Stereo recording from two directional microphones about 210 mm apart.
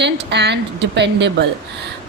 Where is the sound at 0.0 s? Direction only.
55° right (ahead or behind).